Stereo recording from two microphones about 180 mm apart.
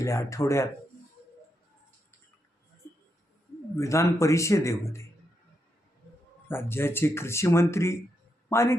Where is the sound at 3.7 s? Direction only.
15° left (ahead or behind).